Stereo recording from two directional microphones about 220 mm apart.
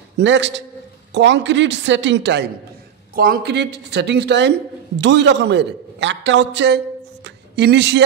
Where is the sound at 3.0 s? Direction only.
40° right (ahead or behind).